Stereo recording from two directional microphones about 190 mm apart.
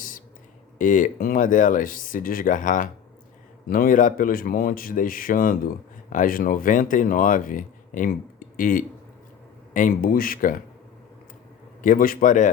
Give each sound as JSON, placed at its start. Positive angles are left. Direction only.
{"t": 0.8, "sound": "speech", "side_deg": 45}
{"t": 11.8, "sound": "speech", "side_deg": 45}